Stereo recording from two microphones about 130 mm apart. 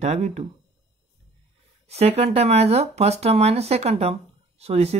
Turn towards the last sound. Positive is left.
turn(degrees=-55)  # may be behind; listen again after turning